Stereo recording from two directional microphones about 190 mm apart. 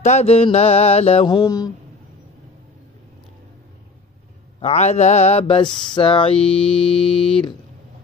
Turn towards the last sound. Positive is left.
turn(degrees=30)  # may be behind; listen again after turning